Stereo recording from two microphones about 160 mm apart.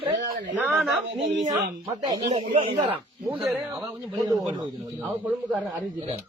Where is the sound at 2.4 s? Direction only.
40° right (ahead or behind).